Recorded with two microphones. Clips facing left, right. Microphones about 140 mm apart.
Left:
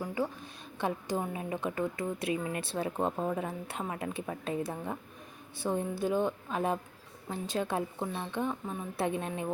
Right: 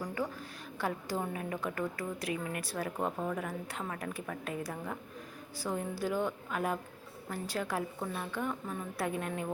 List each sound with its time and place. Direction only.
0.8 s a woman's voice: 20° left (ahead or behind)